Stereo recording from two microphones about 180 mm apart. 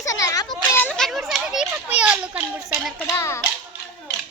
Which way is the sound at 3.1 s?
15° left (ahead or behind).